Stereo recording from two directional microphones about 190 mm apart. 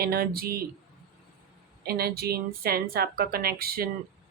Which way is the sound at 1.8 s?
55° right (ahead or behind).